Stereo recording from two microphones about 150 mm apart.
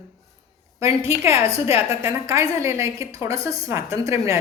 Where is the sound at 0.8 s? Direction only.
20° right (ahead or behind).